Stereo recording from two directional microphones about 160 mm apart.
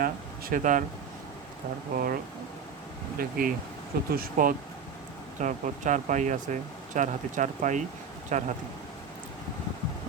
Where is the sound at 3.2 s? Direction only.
60° right (ahead or behind).